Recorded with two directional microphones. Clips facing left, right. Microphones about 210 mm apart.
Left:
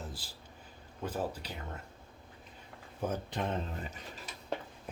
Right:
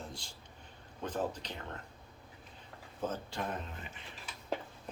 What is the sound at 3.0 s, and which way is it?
Speech, 15° left (ahead or behind).